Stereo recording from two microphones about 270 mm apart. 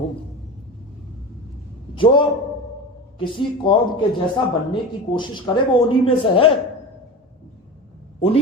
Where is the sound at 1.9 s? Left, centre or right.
Centre.